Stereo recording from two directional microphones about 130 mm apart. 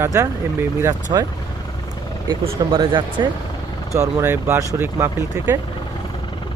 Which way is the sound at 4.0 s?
20° right (ahead or behind).